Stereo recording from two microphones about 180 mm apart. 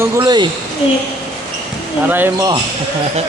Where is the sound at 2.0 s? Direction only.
10° right (ahead or behind).